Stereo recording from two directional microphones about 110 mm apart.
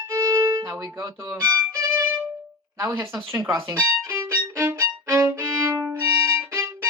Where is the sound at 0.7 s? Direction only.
35° right (ahead or behind).